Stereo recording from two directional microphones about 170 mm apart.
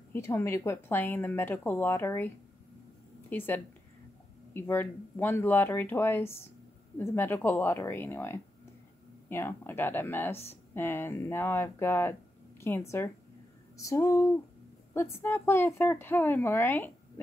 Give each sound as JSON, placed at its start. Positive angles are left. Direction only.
{"t": 0.1, "sound": "speech", "side_deg": 15}